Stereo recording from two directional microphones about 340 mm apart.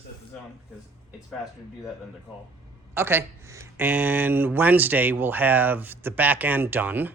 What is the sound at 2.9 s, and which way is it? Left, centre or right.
Speech, centre.